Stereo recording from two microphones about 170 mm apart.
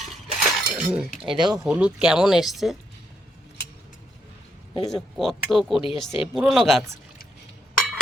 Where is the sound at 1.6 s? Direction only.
5° right (ahead or behind).